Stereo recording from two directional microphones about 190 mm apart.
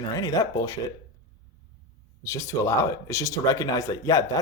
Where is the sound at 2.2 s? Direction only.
15° left (ahead or behind).